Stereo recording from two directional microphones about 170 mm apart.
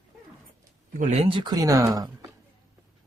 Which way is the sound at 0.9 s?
45° right (ahead or behind).